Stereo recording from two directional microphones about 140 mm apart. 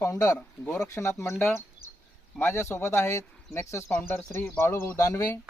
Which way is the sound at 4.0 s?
5° left (ahead or behind).